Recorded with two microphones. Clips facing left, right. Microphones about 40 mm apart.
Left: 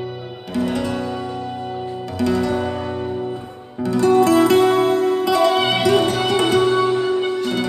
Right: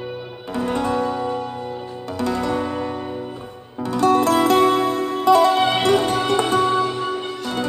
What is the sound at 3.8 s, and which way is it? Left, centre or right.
Music, right.